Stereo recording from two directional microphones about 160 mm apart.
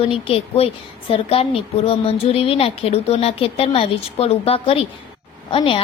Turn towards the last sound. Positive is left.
turn(degrees=35)  # may be behind; listen again after turning